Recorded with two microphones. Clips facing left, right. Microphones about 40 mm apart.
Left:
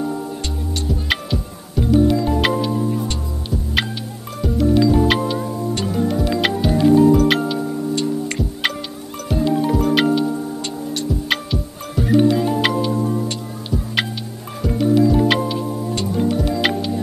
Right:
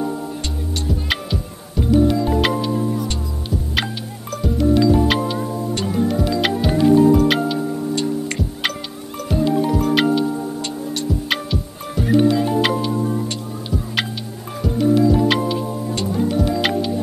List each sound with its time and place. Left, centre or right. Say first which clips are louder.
0.8 s music: left 1 dB; centre